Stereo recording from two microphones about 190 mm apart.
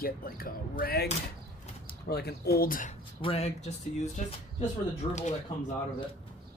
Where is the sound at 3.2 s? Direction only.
30° left (ahead or behind).